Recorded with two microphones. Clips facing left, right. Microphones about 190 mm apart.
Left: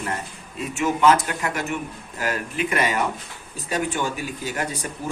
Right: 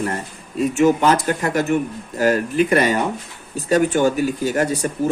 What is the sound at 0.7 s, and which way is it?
Speech, 40° right (ahead or behind).